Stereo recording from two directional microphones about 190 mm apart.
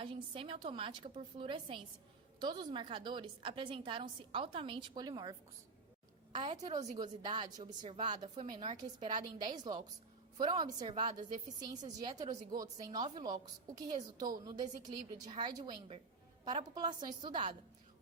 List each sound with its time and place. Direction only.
0.0 s a woman's voice: 30° right (ahead or behind)